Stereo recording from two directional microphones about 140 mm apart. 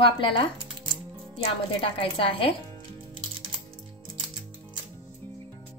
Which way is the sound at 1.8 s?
40° left (ahead or behind).